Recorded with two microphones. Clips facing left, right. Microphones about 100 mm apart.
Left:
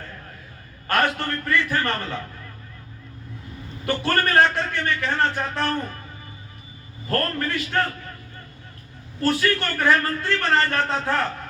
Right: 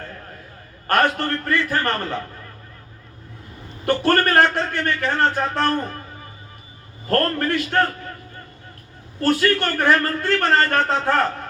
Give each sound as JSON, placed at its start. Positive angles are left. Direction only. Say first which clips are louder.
{"t": 0.9, "sound": "a man's voice", "louder": "right 3 dB", "side_deg": -45}
{"t": 3.8, "sound": "a man's voice", "louder": "right 5 dB", "side_deg": -50}
{"t": 7.1, "sound": "a man's voice", "louder": "right 5 dB", "side_deg": -50}
{"t": 9.2, "sound": "a man's voice", "louder": "right 3 dB", "side_deg": -45}